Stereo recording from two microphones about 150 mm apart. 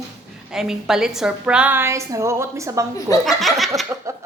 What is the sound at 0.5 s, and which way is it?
A woman's voice, 5° right (ahead or behind).